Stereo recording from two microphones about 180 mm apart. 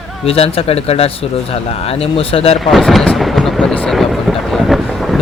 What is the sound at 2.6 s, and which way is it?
Thunder, centre (ahead or behind).